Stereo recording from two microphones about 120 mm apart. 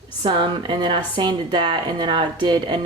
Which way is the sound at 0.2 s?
45° right (ahead or behind).